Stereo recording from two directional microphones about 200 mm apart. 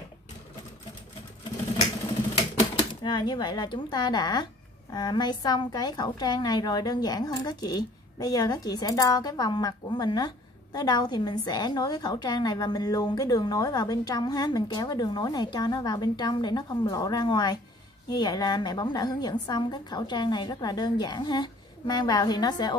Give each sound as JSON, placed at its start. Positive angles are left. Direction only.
{"t": 3.0, "sound": "a woman's voice", "side_deg": 20}